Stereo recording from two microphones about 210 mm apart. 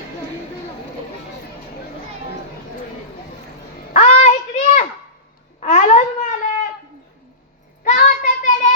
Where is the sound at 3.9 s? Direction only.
35° left (ahead or behind).